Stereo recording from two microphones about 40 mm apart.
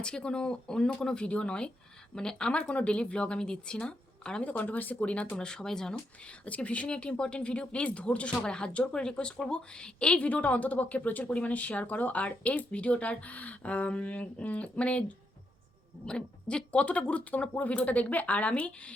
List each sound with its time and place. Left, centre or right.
0.0 s speech: left
2.5 s speech: left
4.4 s a woman's voice: left
5.4 s speech: centre
6.2 s speech: left
10.2 s a woman's voice: left
16.0 s a woman's voice: left